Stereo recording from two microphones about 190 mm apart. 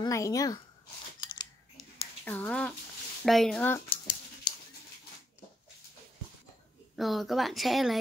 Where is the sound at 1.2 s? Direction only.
25° left (ahead or behind).